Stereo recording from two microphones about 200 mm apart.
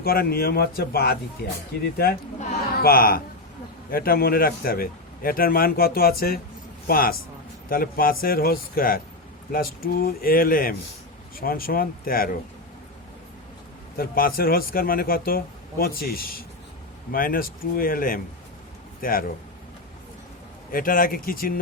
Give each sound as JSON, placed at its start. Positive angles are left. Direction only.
{"t": 0.0, "sound": "speech", "side_deg": 50}
{"t": 13.9, "sound": "speech", "side_deg": 45}
{"t": 20.7, "sound": "speech", "side_deg": 45}